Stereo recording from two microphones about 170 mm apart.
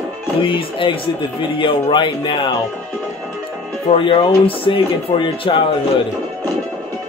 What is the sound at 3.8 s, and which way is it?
Speech, 30° left (ahead or behind).